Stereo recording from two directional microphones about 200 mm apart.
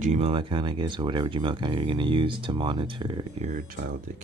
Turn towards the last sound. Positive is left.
turn(degrees=-40)  # may be behind; listen again after turning